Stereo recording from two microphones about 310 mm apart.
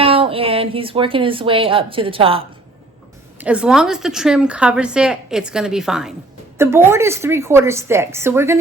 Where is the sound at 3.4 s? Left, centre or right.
Centre.